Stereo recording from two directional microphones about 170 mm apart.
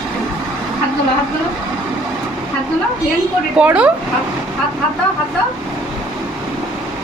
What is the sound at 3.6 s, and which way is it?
Speech, 5° right (ahead or behind).